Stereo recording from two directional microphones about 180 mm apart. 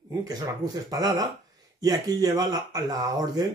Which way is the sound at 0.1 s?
20° right (ahead or behind).